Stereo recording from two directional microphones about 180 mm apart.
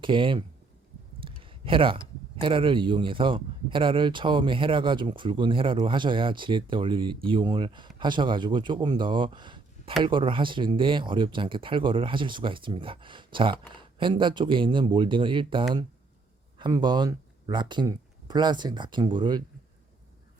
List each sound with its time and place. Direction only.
0.0 s speech: 30° right (ahead or behind)